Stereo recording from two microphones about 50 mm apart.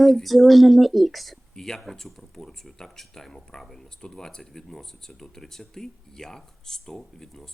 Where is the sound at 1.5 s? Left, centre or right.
Centre.